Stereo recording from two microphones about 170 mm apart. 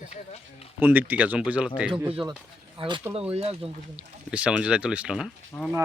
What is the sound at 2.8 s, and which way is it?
Speech, 30° right (ahead or behind).